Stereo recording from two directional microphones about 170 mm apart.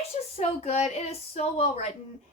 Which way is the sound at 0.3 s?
40° left (ahead or behind).